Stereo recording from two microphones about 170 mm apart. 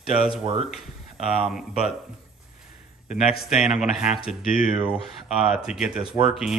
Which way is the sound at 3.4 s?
5° right (ahead or behind).